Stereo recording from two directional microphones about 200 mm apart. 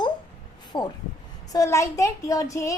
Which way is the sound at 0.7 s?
20° left (ahead or behind).